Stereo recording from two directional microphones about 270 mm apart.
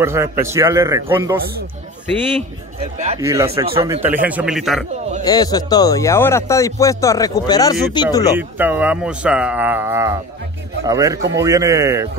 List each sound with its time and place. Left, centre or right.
0.0 s speech: centre
2.8 s speech: right
3.2 s speech: centre
4.0 s speech: centre
5.2 s speech: centre
8.4 s speech: centre